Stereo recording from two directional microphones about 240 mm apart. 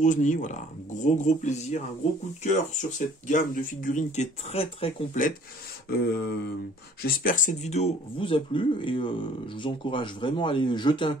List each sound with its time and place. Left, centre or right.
0.0 s speech: left
5.9 s speech: left; by 11.1 s centre